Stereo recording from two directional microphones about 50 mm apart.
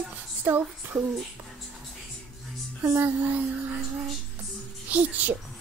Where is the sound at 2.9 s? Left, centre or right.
Right.